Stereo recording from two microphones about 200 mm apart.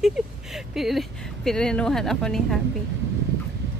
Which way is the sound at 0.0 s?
Centre (ahead or behind).